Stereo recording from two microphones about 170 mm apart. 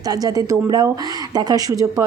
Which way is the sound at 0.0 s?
20° right (ahead or behind).